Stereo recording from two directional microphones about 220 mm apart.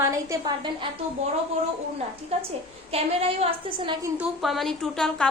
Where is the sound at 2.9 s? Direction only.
25° right (ahead or behind).